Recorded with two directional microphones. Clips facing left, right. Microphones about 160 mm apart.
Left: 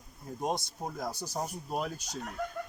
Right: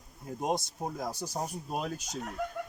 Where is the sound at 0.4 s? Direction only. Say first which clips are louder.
Right 2 dB; 10° right (ahead or behind).